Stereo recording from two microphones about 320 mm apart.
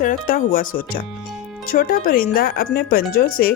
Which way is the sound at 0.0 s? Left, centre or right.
Left.